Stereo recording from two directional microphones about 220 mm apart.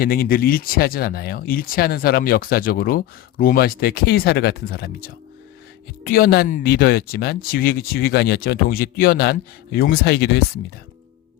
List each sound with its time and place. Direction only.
0.0 s speech: 40° left (ahead or behind)